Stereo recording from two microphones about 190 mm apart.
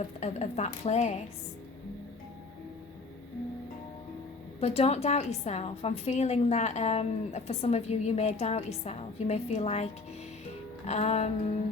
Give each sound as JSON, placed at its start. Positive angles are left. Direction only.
{"t": 0.2, "sound": "a woman's voice", "side_deg": 35}
{"t": 4.6, "sound": "a woman's voice", "side_deg": 35}